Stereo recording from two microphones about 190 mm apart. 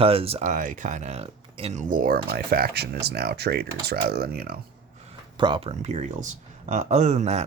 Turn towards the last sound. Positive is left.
turn(degrees=-35)  # may be behind; listen again after turning